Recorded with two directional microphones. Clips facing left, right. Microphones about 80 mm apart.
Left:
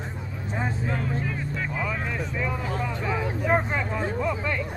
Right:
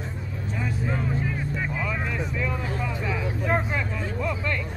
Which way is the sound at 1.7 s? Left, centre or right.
Centre.